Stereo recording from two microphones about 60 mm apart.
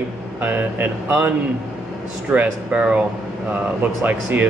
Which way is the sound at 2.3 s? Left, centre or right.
Right.